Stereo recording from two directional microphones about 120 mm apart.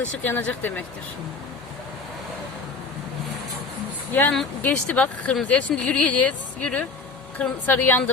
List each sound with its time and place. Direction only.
0.3 s speech: 15° left (ahead or behind)
4.1 s speech: 15° left (ahead or behind)